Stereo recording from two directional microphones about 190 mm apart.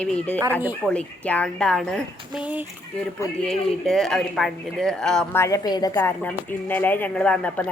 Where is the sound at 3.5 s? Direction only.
Centre (ahead or behind).